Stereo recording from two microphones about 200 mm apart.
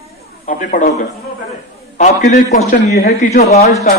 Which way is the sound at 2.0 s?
35° left (ahead or behind).